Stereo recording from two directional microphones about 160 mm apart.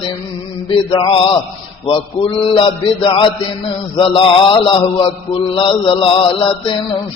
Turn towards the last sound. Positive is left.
turn(degrees=35)  # may be behind; listen again after turning